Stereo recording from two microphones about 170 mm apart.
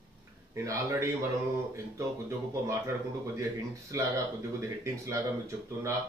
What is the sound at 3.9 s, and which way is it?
A man's voice, 20° right (ahead or behind).